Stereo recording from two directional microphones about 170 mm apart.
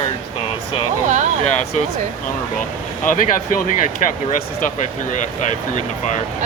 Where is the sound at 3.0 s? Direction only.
50° left (ahead or behind).